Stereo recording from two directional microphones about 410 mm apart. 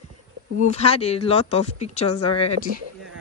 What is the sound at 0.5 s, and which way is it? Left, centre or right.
Speech, centre.